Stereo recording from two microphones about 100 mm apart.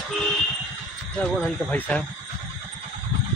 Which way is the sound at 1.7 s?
15° left (ahead or behind).